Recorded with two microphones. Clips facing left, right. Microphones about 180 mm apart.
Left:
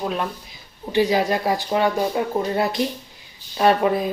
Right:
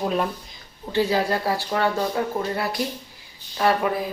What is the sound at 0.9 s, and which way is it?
Speech, 15° left (ahead or behind).